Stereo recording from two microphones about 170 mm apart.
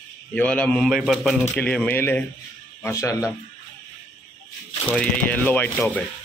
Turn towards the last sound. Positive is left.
turn(degrees=10)  # may be behind; listen again after turning